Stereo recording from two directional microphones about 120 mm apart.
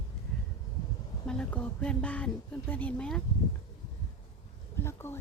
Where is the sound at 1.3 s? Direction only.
10° left (ahead or behind).